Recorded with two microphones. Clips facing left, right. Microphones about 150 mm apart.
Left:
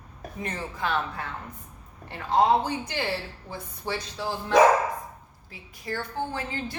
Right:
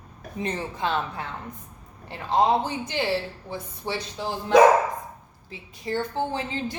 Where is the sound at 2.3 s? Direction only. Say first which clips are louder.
Even; 20° right (ahead or behind).